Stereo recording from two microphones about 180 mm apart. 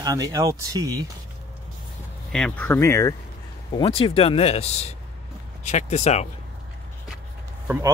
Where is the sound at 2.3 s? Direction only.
5° left (ahead or behind).